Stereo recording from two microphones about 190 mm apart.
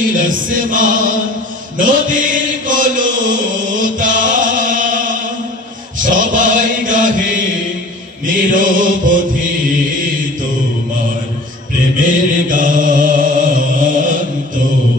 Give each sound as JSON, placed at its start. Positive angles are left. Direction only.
{"t": 0.0, "sound": "music", "side_deg": -45}
{"t": 1.8, "sound": "chant", "side_deg": -45}
{"t": 8.3, "sound": "mantra", "side_deg": -45}
{"t": 12.0, "sound": "mantra", "side_deg": -45}